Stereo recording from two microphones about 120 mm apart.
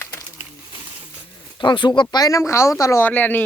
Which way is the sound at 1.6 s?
40° left (ahead or behind).